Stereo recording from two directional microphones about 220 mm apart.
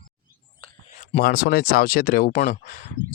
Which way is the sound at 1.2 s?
45° left (ahead or behind).